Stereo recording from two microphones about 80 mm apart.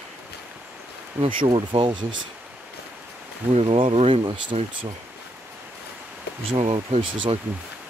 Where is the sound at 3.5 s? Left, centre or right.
Right.